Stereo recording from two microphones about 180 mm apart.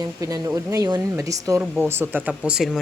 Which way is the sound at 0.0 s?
20° right (ahead or behind).